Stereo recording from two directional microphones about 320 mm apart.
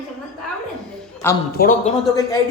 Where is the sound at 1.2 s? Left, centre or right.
Centre.